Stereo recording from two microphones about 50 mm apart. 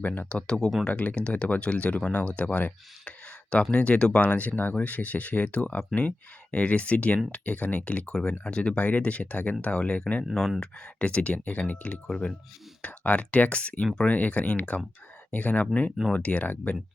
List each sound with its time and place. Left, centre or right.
0.0 s speech: left
0.3 s speech: centre
0.9 s speech: left